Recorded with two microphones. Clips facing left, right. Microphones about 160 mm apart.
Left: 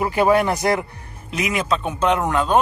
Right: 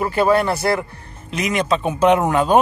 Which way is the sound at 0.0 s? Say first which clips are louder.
Even; 15° left (ahead or behind).